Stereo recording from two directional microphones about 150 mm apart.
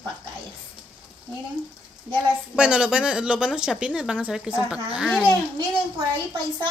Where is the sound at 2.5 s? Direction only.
5° right (ahead or behind).